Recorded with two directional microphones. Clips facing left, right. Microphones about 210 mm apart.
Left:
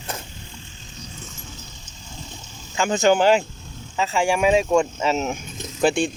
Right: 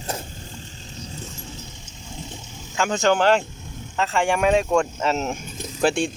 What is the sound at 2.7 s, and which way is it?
Speech, centre (ahead or behind).